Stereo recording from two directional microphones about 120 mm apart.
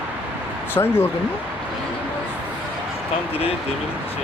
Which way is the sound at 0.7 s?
20° left (ahead or behind).